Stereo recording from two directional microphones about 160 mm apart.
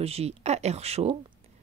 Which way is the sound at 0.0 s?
40° right (ahead or behind).